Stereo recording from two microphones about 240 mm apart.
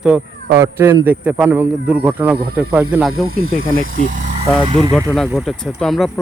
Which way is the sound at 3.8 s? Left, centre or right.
Right.